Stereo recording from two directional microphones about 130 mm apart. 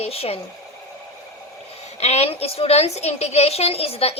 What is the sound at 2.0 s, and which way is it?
A child's voice, 55° left (ahead or behind).